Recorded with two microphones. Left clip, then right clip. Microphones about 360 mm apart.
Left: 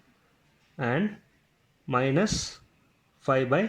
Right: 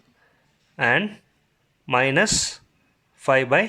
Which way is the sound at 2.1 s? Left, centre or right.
Centre.